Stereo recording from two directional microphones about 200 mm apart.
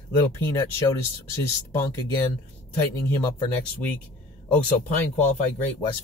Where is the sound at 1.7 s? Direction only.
10° left (ahead or behind).